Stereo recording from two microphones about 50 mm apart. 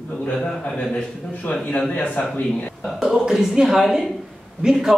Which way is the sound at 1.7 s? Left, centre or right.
Left.